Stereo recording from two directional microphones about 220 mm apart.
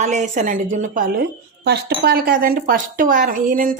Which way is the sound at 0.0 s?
30° right (ahead or behind).